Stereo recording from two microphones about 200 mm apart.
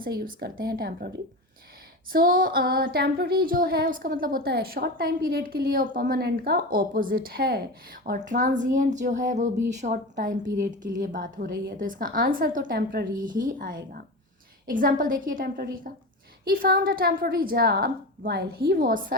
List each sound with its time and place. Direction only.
0.0 s female singing: 50° right (ahead or behind)
2.1 s female singing: 45° right (ahead or behind)
8.0 s speech: 45° right (ahead or behind)
10.9 s female singing: 40° right (ahead or behind)
14.7 s female singing: 45° right (ahead or behind)